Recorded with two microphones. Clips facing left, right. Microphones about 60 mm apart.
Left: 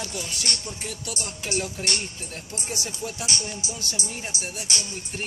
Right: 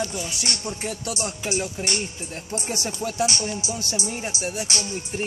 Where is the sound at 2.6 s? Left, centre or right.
Right.